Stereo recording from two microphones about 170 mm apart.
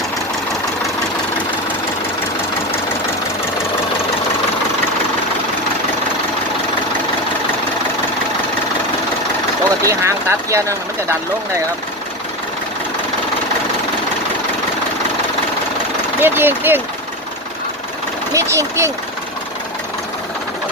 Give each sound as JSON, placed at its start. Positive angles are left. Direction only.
{"t": 9.8, "sound": "speech", "side_deg": -15}
{"t": 16.2, "sound": "speech", "side_deg": -15}
{"t": 18.3, "sound": "speech", "side_deg": -20}